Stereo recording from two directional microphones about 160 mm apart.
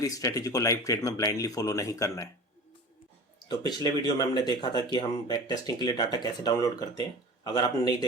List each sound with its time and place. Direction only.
0.0 s speech: 20° left (ahead or behind)
3.5 s speech: 25° left (ahead or behind)